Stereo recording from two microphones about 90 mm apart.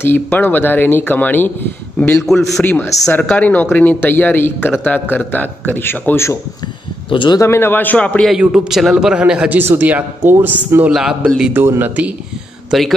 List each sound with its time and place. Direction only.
0.0 s speech: 25° left (ahead or behind)
2.2 s a man's voice: 5° left (ahead or behind)
2.6 s speech: 20° left (ahead or behind)
7.1 s speech: 65° left (ahead or behind)
7.3 s speech: 30° left (ahead or behind); by 8.3 s 15° left (ahead or behind)
8.3 s a man's voice: 10° right (ahead or behind)
9.6 s a man's voice: 25° right (ahead or behind)
10.9 s a man's voice: 5° right (ahead or behind)
11.5 s a man's voice: 25° right (ahead or behind)
12.7 s a man's voice: 5° right (ahead or behind)